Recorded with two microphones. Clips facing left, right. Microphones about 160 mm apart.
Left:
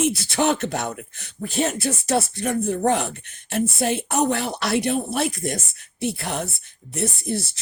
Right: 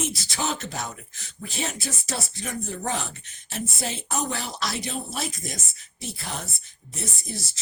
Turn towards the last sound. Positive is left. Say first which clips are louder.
# left 9 dB
turn(degrees=60)  # may be behind; listen again after turning